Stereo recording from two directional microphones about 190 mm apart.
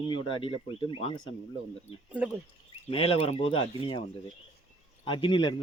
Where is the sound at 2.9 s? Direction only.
30° left (ahead or behind).